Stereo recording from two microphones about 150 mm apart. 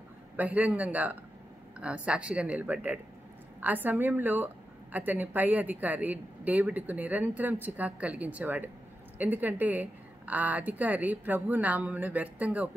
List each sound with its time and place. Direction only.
0.4 s a woman's voice: 10° right (ahead or behind)